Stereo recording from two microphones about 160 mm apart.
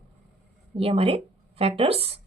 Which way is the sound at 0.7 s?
35° right (ahead or behind).